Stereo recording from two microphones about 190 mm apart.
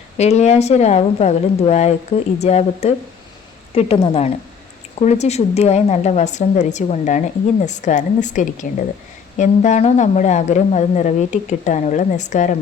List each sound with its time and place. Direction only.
0.2 s speech: 35° left (ahead or behind)